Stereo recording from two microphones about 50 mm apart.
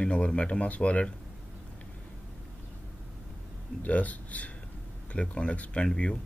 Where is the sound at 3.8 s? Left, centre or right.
Left.